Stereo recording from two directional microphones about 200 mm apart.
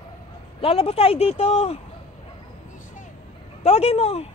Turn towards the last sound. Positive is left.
turn(degrees=30)  # may be behind; listen again after turning